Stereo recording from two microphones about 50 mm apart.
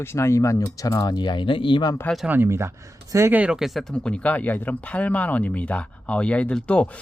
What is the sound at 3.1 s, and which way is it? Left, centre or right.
Speech, right.